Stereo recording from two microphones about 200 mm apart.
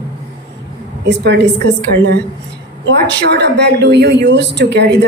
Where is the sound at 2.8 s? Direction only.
60° right (ahead or behind).